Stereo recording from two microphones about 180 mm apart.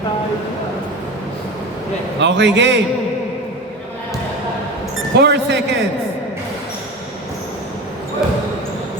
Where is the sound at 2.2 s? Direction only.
80° right.